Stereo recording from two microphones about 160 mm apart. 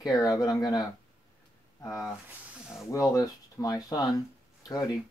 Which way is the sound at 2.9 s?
20° left (ahead or behind).